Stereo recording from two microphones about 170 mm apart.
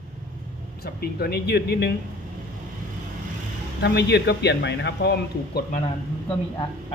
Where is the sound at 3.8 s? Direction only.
80° left.